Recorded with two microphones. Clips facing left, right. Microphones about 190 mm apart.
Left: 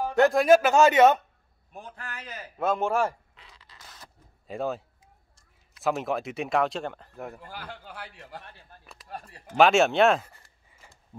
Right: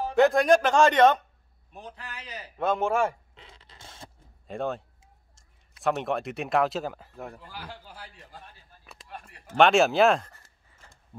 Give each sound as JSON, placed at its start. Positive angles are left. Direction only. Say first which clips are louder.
{"t": 0.1, "sound": "speech", "louder": "left 1 dB", "side_deg": 0}
{"t": 1.7, "sound": "a man's voice", "louder": "left 1 dB", "side_deg": 50}
{"t": 2.6, "sound": "speech", "louder": "even", "side_deg": 0}
{"t": 3.3, "sound": "a sound", "louder": "right 3 dB", "side_deg": -25}
{"t": 4.5, "sound": "speech", "louder": "even", "side_deg": 5}
{"t": 7.4, "sound": "speech", "louder": "left 1 dB", "side_deg": 55}
{"t": 9.0, "sound": "a sound", "louder": "left 4 dB", "side_deg": 35}
{"t": 9.6, "sound": "speech", "louder": "even", "side_deg": 0}
{"t": 10.3, "sound": "a sound", "louder": "even", "side_deg": 15}